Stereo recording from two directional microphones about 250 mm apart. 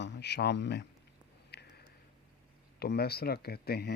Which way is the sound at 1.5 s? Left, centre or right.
Left.